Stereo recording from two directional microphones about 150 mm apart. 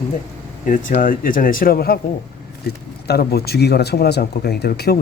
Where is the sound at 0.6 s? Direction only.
60° left (ahead or behind); by 2.0 s 90° left.